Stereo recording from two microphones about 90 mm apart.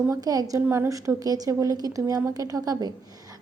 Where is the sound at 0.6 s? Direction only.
30° right (ahead or behind).